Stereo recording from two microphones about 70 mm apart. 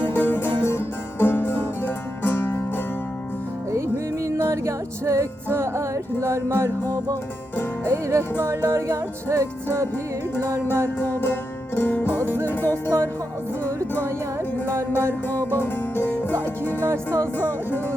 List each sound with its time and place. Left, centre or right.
0.0 s music: left
3.7 s music: right
6.8 s music: right
7.9 s music: right
8.4 s music: right
8.9 s music: right
10.5 s music: right
11.0 s music: left
14.8 s music: right
15.3 s music: left